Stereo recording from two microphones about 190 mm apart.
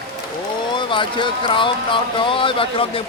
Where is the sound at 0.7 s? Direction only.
25° left (ahead or behind).